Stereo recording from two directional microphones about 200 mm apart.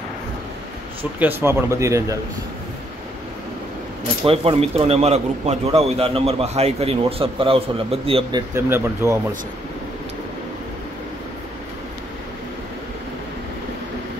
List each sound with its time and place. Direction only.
1.2 s speech: 10° right (ahead or behind)
4.2 s speech: 30° right (ahead or behind)
8.5 s speech: 10° right (ahead or behind)